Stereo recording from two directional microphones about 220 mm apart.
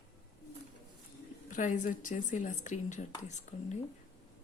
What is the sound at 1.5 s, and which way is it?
Speech, 35° left (ahead or behind).